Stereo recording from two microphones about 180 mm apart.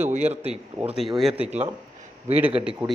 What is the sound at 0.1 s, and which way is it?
Speech, 40° right (ahead or behind).